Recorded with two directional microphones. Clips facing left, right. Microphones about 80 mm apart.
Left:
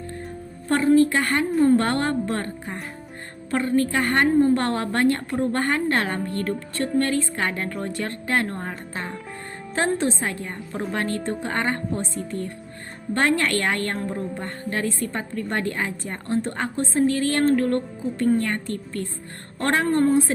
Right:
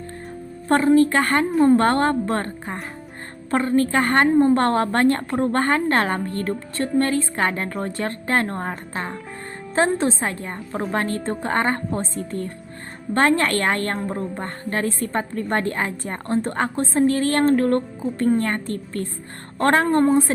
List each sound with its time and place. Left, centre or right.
0.7 s a woman's voice: right
9.7 s a woman's voice: right